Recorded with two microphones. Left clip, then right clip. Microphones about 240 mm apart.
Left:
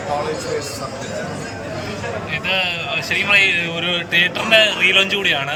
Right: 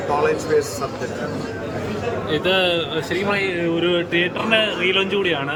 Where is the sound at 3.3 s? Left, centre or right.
Centre.